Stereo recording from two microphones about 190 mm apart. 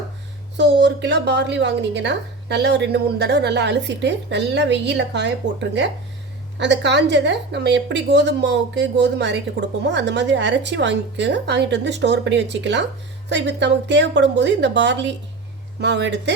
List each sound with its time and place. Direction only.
0.5 s a woman's voice: 65° right (ahead or behind)
6.6 s a woman's voice: 70° right (ahead or behind)